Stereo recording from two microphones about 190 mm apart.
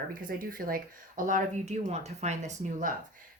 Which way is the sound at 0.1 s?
50° right (ahead or behind).